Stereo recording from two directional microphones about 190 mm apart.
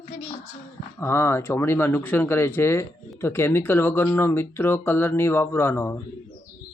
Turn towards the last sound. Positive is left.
turn(degrees=15)  # may be behind; listen again after turning